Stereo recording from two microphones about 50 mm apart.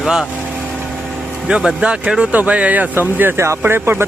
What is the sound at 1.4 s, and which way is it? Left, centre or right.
Speech, centre.